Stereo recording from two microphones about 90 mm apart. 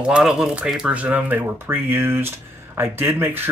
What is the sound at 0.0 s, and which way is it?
Speech, 10° right (ahead or behind).